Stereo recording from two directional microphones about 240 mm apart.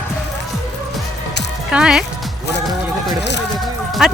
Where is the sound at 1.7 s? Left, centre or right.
Centre.